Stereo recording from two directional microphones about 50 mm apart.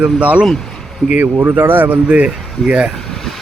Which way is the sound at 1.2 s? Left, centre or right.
Right.